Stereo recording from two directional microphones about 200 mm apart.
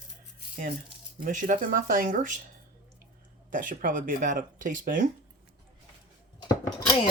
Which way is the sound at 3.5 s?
40° right (ahead or behind).